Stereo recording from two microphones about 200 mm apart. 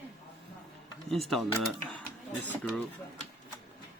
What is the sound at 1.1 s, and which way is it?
Speech, centre (ahead or behind).